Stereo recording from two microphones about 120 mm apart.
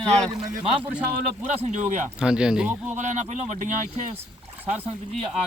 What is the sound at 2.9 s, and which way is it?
Speech, 90° right.